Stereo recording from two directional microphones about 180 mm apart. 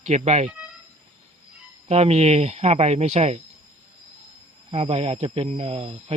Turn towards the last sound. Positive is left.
turn(degrees=-30)  # may be behind; listen again after turning